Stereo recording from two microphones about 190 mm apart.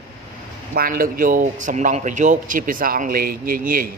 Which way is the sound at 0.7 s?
50° right (ahead or behind).